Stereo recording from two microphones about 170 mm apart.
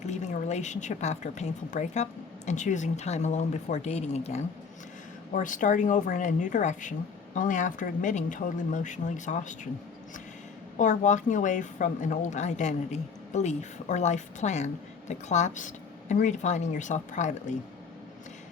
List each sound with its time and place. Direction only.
0.0 s a woman's voice: 45° left (ahead or behind)
5.3 s a woman's voice: 50° left (ahead or behind)
10.8 s a woman's voice: 45° left (ahead or behind)